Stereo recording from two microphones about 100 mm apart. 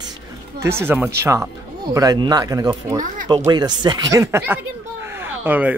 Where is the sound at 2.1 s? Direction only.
40° right (ahead or behind).